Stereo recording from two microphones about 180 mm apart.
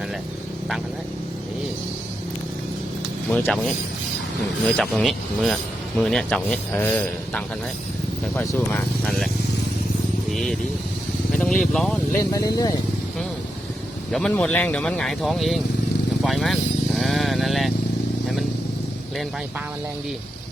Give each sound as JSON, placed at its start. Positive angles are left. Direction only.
{"t": 3.2, "sound": "speech", "side_deg": 5}
{"t": 4.6, "sound": "speech", "side_deg": 0}
{"t": 10.3, "sound": "speech", "side_deg": 0}
{"t": 12.3, "sound": "speech", "side_deg": 20}
{"t": 14.1, "sound": "speech", "side_deg": 5}